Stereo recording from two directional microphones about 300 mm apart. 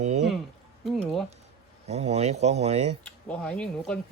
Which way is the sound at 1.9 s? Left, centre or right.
Right.